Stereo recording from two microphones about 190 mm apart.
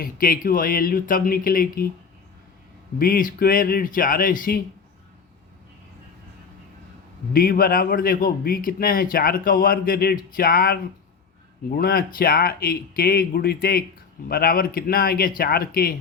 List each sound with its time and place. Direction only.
0.0 s a man's voice: 50° left (ahead or behind)
3.0 s a man's voice: 45° left (ahead or behind)
7.3 s a man's voice: 50° left (ahead or behind)